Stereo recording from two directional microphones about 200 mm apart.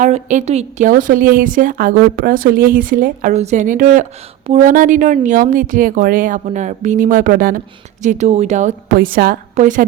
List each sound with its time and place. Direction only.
0.0 s a woman's voice: 40° right (ahead or behind)
8.0 s a woman's voice: 35° right (ahead or behind)